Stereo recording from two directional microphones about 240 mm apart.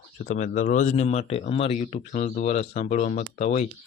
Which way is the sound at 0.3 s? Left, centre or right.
Left.